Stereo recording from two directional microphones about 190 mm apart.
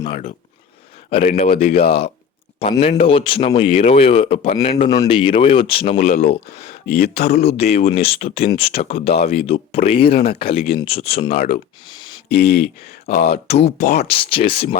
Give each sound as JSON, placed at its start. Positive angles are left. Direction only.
{"t": 0.0, "sound": "speech", "side_deg": 35}
{"t": 12.3, "sound": "speech", "side_deg": 55}
{"t": 13.5, "sound": "speech", "side_deg": 35}
{"t": 13.7, "sound": "speech", "side_deg": 55}
{"t": 14.1, "sound": "speech", "side_deg": 30}